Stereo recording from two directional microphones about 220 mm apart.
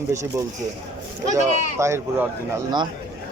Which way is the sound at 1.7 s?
10° right (ahead or behind).